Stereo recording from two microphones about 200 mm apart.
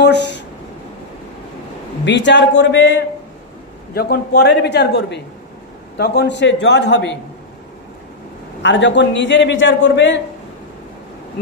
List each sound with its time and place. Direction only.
0.0 s a sound: 60° left (ahead or behind)
2.0 s a man's voice: 60° left (ahead or behind)
3.9 s a man's voice: 50° left (ahead or behind)
8.6 s a man's voice: 65° left (ahead or behind)